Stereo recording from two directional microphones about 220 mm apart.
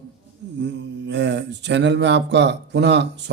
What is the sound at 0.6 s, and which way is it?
Mantra, 55° right (ahead or behind).